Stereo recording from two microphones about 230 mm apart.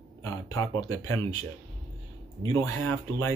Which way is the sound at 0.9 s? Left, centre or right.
Right.